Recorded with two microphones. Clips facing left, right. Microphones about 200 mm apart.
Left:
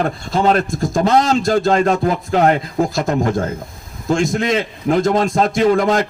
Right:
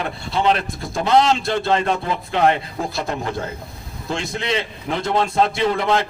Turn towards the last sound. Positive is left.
turn(degrees=45)  # may be behind; listen again after turning